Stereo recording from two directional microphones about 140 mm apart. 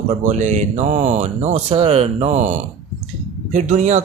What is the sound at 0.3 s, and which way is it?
Speech, 55° right (ahead or behind).